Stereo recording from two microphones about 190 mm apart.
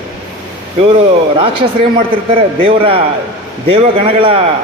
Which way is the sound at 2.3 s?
30° right (ahead or behind).